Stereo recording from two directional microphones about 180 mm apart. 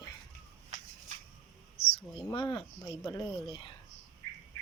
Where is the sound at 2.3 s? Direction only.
25° left (ahead or behind).